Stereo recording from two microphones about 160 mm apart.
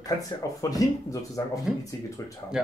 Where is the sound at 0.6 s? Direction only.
20° left (ahead or behind).